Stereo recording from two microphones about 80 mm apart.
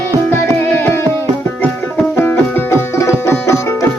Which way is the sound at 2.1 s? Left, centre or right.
Left.